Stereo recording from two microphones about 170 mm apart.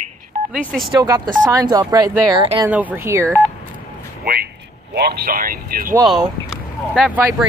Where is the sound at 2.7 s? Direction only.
10° right (ahead or behind).